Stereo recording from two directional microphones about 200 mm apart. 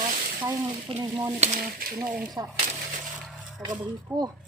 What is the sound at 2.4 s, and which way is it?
Speech, 15° right (ahead or behind).